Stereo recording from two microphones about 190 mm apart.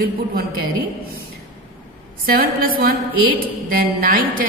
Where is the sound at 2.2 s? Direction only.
50° right (ahead or behind).